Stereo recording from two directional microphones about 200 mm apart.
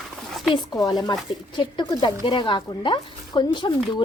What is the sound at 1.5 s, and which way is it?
Speech, 20° left (ahead or behind).